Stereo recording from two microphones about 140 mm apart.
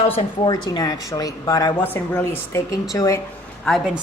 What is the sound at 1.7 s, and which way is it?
Speech, 15° left (ahead or behind).